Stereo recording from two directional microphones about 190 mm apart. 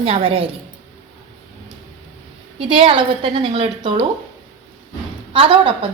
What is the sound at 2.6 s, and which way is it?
A woman's voice, 30° right (ahead or behind).